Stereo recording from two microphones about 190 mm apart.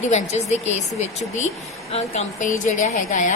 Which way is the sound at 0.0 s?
40° left (ahead or behind).